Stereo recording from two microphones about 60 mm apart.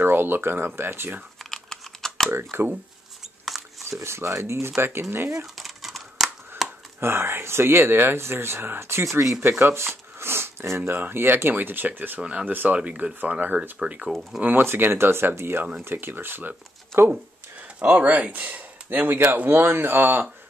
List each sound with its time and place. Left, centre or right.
0.0 s speech: right
1.5 s typing: centre
2.3 s speech: right
4.0 s speech: right
5.6 s a sound: centre
7.0 s speech: right
12.2 s speech: centre
13.6 s speech: centre
14.4 s speech: right
16.9 s speech: right
17.7 s speech: right